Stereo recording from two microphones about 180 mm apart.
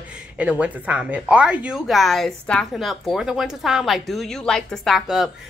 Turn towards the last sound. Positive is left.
turn(degrees=-5)  # may be behind; listen again after turning